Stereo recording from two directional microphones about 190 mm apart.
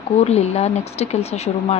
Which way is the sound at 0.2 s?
35° left (ahead or behind).